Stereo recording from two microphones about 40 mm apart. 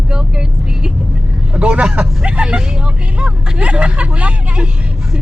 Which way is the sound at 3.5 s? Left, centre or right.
Right.